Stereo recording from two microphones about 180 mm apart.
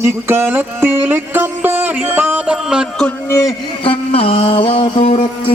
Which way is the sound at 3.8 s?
30° left (ahead or behind).